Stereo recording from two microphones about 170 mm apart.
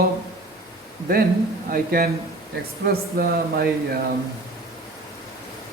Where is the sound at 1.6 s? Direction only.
60° right (ahead or behind).